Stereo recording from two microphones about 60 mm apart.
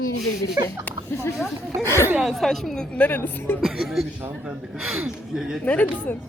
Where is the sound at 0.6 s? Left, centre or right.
Right.